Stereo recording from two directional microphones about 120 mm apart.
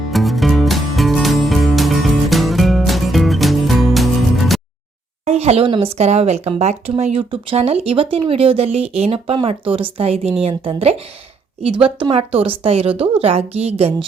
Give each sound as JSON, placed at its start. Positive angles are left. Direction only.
{"t": 0.1, "sound": "music", "side_deg": 0}
{"t": 5.2, "sound": "a woman's voice", "side_deg": -60}